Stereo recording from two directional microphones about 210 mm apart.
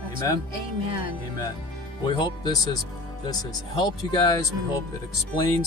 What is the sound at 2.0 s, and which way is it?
Speech, 20° left (ahead or behind).